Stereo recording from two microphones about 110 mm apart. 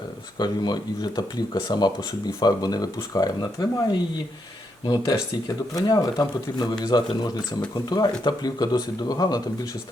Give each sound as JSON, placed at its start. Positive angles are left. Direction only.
{"t": 0.3, "sound": "speech", "side_deg": 40}
{"t": 4.9, "sound": "speech", "side_deg": 35}